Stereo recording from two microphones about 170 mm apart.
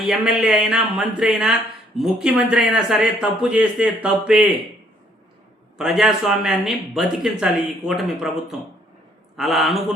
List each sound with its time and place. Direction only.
0.0 s speech: 5° right (ahead or behind)
5.7 s speech: centre (ahead or behind)